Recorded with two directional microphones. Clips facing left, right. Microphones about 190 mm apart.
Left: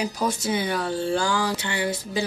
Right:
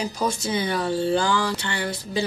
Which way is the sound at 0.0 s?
5° left (ahead or behind).